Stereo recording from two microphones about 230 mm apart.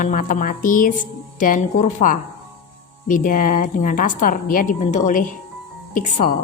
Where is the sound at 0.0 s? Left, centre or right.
Left.